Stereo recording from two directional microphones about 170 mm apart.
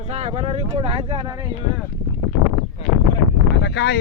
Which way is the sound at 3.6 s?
85° left.